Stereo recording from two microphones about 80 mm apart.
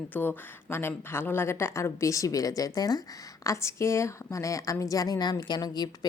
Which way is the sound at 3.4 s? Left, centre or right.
Left.